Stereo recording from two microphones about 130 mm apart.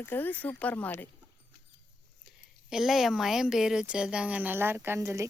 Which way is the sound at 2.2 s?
5° right (ahead or behind).